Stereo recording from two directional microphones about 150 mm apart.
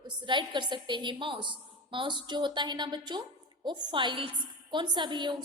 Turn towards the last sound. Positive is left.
turn(degrees=-30)  # may be behind; listen again after turning